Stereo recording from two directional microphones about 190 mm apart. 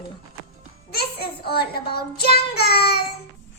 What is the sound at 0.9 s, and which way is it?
Child singing, 55° left (ahead or behind).